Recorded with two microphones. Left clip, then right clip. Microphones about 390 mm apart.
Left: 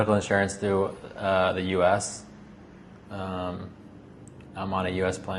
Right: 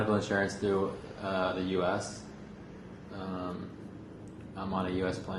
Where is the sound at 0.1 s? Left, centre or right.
Left.